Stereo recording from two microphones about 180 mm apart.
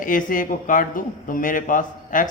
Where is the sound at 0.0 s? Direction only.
50° left (ahead or behind).